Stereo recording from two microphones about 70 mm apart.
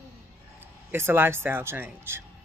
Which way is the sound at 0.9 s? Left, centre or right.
Right.